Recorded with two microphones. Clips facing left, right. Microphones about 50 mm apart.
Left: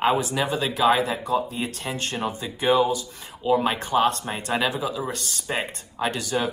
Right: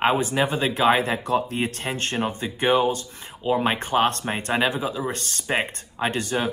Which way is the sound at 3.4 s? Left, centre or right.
Right.